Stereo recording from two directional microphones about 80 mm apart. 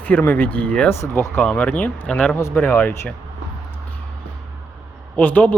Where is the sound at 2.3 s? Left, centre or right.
Left.